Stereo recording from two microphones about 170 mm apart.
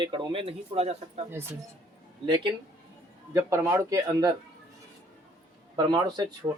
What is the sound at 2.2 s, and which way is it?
Speech, 30° right (ahead or behind).